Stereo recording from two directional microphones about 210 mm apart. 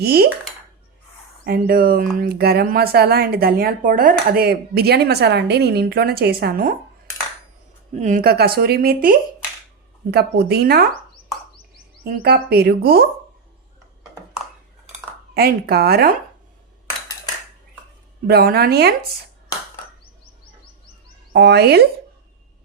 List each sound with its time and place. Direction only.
0.0 s speech: 50° right (ahead or behind)
1.5 s speech: 45° right (ahead or behind)
7.9 s speech: 35° right (ahead or behind)
12.0 s speech: 50° right (ahead or behind)
15.4 s speech: 45° right (ahead or behind)
18.3 s speech: 50° right (ahead or behind)
21.3 s speech: 50° right (ahead or behind)